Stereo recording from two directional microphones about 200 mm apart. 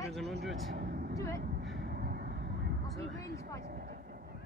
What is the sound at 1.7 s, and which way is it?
Vehicle, 50° right (ahead or behind).